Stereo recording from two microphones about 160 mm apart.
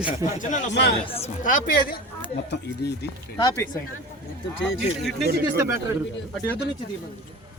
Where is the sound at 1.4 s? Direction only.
60° left (ahead or behind).